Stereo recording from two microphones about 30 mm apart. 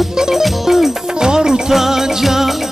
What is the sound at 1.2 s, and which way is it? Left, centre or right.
Music, right.